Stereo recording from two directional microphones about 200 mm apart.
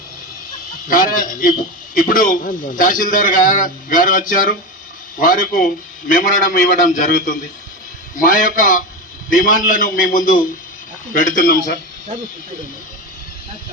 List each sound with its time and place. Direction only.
0.9 s a man's voice: 45° left (ahead or behind)